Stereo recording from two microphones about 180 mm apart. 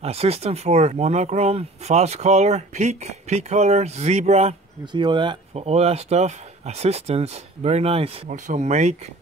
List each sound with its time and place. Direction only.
0.0 s speech: 35° right (ahead or behind)
4.9 s speech: 25° right (ahead or behind)